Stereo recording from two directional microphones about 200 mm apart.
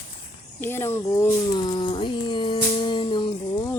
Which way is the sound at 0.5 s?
10° left (ahead or behind).